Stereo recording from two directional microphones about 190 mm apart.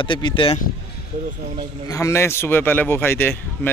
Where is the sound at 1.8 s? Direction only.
15° left (ahead or behind).